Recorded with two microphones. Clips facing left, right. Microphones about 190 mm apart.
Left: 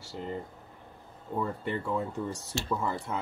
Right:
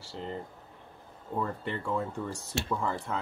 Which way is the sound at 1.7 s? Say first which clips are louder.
Left 1 dB; 10° left (ahead or behind).